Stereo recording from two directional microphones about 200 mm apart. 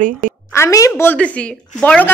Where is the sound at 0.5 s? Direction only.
15° left (ahead or behind).